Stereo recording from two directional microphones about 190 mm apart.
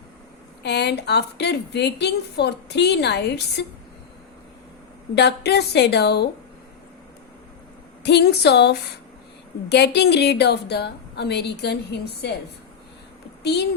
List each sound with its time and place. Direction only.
0.6 s a woman's voice: 60° left (ahead or behind)
5.1 s a woman's voice: 60° left (ahead or behind)
8.0 s a woman's voice: 60° left (ahead or behind)
13.4 s a child's voice: 60° left (ahead or behind)